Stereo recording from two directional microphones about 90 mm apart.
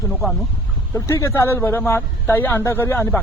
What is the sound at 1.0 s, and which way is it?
A man's voice, 30° left (ahead or behind).